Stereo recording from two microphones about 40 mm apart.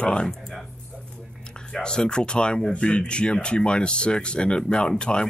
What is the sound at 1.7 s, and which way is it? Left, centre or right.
Speech, centre.